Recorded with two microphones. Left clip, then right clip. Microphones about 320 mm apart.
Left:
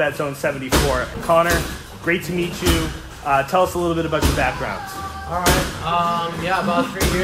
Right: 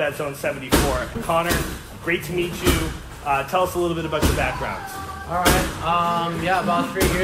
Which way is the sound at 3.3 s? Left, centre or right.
Left.